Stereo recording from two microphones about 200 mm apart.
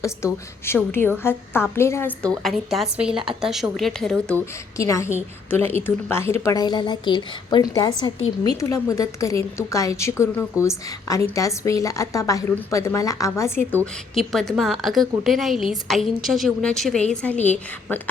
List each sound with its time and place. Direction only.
0.2 s a woman's voice: 15° left (ahead or behind)
4.8 s a woman's voice: 15° left (ahead or behind)
14.2 s a woman's voice: centre (ahead or behind)